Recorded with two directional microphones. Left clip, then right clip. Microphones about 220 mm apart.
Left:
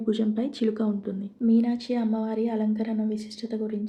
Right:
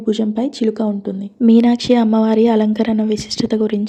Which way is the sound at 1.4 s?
40° right (ahead or behind).